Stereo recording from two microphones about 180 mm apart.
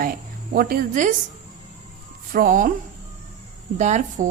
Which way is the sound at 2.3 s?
50° right (ahead or behind).